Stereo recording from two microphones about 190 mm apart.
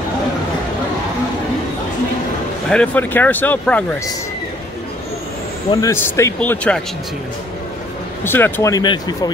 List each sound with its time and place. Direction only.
2.7 s speech: 5° left (ahead or behind)
5.7 s speech: 15° left (ahead or behind)
8.2 s speech: 10° left (ahead or behind)